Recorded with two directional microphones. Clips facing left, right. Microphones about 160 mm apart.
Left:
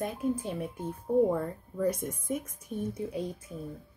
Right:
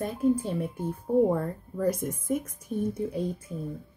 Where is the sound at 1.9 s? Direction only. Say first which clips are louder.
Right 5 dB; 5° right (ahead or behind).